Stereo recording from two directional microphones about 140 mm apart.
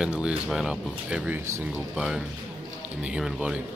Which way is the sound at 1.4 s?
20° right (ahead or behind).